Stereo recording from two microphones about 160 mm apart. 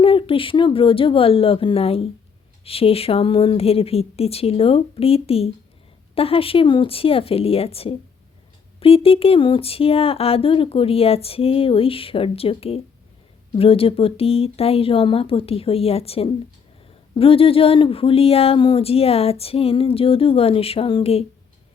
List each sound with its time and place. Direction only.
0.0 s speech: 35° left (ahead or behind)